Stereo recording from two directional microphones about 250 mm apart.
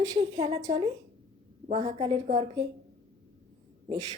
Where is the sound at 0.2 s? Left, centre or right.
Right.